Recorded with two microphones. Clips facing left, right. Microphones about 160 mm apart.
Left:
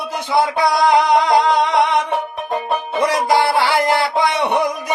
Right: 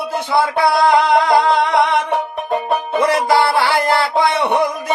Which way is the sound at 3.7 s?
15° left (ahead or behind).